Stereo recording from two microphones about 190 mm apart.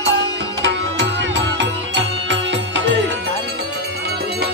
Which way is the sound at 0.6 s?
70° right (ahead or behind).